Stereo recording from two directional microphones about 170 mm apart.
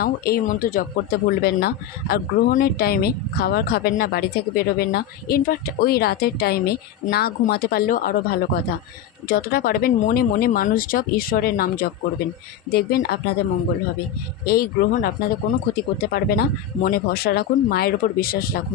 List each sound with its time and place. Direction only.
0.0 s speech: 60° left (ahead or behind)
1.4 s speech: 65° left (ahead or behind)
14.4 s speech: 60° left (ahead or behind)